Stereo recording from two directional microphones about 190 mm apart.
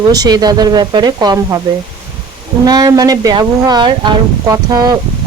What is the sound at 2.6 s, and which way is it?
Speech, 20° right (ahead or behind).